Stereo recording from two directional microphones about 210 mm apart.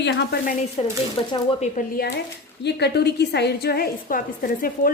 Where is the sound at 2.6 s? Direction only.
55° left (ahead or behind).